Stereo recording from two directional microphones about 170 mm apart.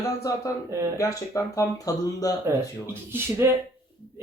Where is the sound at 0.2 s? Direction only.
20° left (ahead or behind).